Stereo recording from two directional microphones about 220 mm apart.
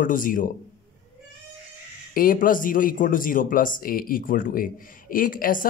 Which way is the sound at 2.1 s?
40° left (ahead or behind).